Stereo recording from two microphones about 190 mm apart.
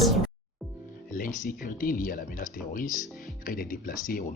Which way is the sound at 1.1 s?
45° left (ahead or behind).